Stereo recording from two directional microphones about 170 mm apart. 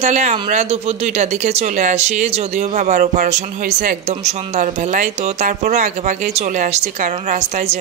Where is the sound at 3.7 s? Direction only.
75° right (ahead or behind).